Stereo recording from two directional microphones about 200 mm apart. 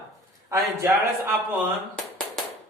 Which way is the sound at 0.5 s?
15° right (ahead or behind).